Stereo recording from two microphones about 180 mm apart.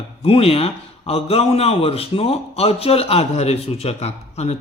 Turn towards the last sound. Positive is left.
turn(degrees=35)  # may be behind; listen again after turning